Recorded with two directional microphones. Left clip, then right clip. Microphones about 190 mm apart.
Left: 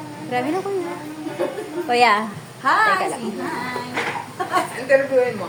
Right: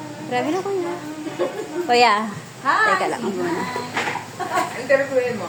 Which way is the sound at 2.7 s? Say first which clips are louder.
Left 2 dB; 60° left (ahead or behind).